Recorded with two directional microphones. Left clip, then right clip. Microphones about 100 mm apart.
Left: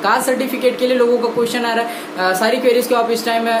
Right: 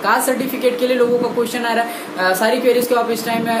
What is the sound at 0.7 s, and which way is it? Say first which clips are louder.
Speech: left 1 dB; 20° left (ahead or behind).